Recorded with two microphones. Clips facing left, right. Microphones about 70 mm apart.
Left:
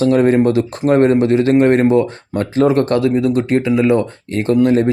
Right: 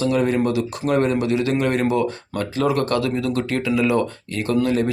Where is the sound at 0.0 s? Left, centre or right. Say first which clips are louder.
Left 7 dB; left.